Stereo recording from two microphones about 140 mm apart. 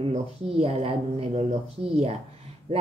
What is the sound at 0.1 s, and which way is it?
Speech, 45° right (ahead or behind).